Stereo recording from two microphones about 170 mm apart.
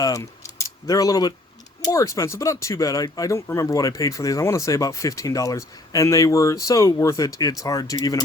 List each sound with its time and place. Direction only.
0.0 s speech: 20° left (ahead or behind)